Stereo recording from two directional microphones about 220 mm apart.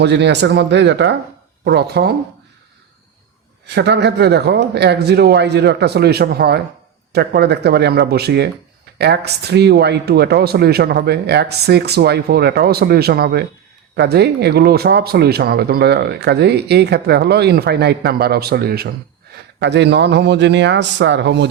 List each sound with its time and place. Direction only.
0.0 s speech: 50° right (ahead or behind)
3.8 s speech: 50° right (ahead or behind)